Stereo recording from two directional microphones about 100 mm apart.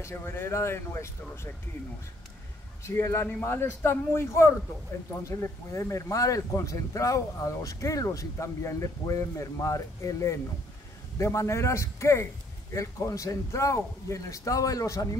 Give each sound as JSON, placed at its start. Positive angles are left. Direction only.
{"t": 0.0, "sound": "speech", "side_deg": 25}
{"t": 2.8, "sound": "a man's voice", "side_deg": 30}